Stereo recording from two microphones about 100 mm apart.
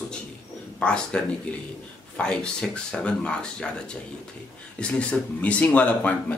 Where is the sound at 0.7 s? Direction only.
10° left (ahead or behind).